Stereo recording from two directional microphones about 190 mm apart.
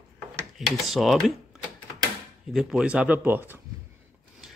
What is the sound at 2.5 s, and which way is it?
Speech, centre (ahead or behind).